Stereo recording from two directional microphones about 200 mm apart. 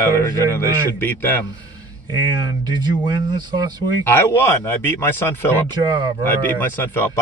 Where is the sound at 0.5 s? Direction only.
10° left (ahead or behind).